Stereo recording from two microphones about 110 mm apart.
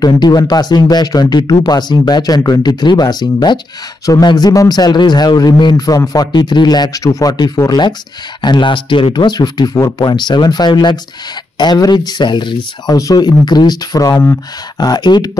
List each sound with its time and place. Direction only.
0.0 s a man's voice: 35° left (ahead or behind)
12.8 s a man's voice: 35° left (ahead or behind)